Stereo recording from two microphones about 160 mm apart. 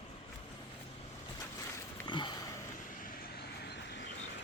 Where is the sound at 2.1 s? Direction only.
30° left (ahead or behind).